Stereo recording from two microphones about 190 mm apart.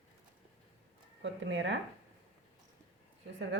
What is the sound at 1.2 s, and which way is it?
Speech, 70° right (ahead or behind).